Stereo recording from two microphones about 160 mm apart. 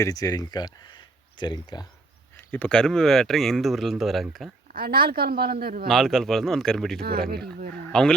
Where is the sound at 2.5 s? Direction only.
5° left (ahead or behind).